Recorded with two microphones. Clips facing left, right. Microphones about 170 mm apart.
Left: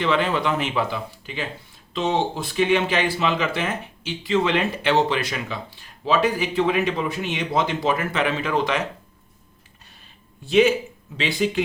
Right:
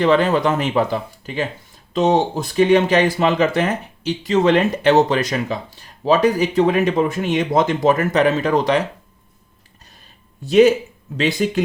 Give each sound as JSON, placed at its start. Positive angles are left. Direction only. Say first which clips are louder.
{"t": 0.0, "sound": "speech", "louder": "right 6 dB", "side_deg": -40}
{"t": 10.4, "sound": "speech", "louder": "right 5 dB", "side_deg": -40}